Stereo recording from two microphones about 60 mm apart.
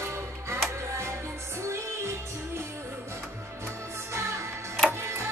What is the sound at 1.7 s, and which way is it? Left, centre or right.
Music, right.